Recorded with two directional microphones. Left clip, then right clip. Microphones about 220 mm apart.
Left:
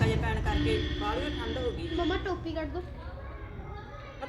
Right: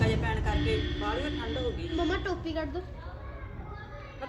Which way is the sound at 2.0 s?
50° right (ahead or behind).